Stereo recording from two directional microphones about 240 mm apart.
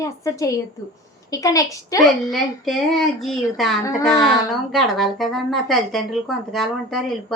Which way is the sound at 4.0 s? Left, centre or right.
Centre.